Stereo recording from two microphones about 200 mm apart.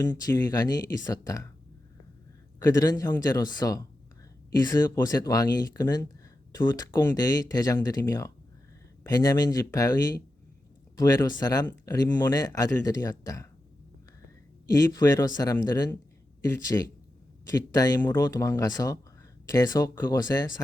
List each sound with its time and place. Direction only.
0.0 s speech: 20° left (ahead or behind)
2.6 s speech: 20° left (ahead or behind)
14.7 s speech: 20° left (ahead or behind)